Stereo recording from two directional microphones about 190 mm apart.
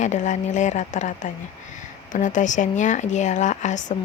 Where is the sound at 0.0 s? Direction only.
40° left (ahead or behind).